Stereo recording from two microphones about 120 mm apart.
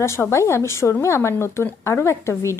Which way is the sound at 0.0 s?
25° left (ahead or behind).